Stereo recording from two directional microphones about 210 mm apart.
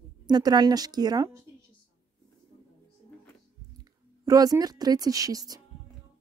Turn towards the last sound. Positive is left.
turn(degrees=-15)  # may be behind; listen again after turning